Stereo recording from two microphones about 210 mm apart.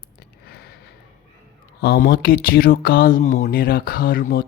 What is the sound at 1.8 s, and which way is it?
Speech, 50° left (ahead or behind).